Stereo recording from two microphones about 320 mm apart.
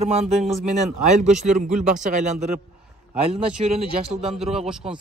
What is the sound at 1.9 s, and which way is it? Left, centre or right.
Speech, right.